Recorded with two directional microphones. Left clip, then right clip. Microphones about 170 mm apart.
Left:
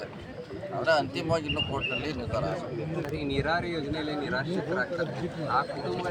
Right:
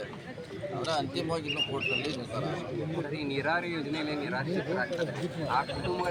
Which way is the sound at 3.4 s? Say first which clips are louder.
Left 1 dB; 40° left (ahead or behind).